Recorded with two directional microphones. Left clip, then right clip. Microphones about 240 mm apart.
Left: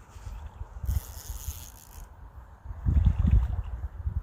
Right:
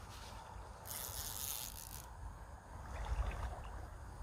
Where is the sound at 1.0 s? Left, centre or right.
Centre.